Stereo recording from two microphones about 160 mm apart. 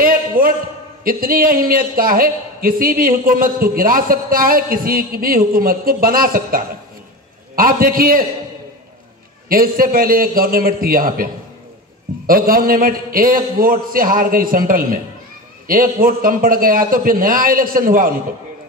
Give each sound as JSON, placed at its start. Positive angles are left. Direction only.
{"t": 0.4, "sound": "a sound", "side_deg": -60}
{"t": 1.0, "sound": "a man's voice", "side_deg": -65}
{"t": 9.5, "sound": "a man's voice", "side_deg": -65}
{"t": 12.3, "sound": "a man's voice", "side_deg": -65}